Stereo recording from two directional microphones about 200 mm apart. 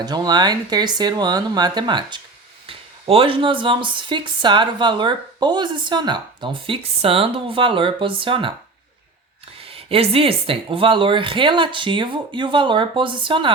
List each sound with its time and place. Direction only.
0.0 s speech: 20° right (ahead or behind)
9.6 s speech: 30° right (ahead or behind)